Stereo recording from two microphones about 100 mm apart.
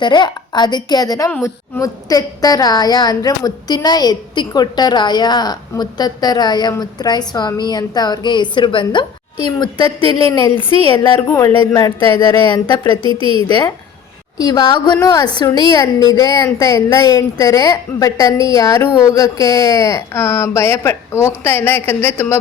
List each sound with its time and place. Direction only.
0.0 s a woman's voice: 50° left (ahead or behind); by 22.4 s 20° left (ahead or behind)